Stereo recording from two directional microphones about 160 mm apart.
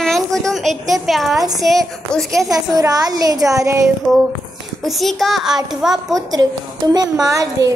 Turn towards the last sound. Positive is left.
turn(degrees=-20)  # may be behind; listen again after turning